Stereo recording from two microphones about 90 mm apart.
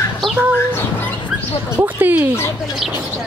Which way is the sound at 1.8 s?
20° right (ahead or behind).